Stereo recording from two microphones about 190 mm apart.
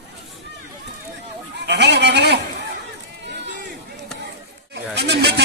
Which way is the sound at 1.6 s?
65° right (ahead or behind).